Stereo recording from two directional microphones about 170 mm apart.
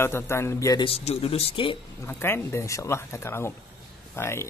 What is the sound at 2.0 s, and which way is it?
A man's voice, 15° left (ahead or behind).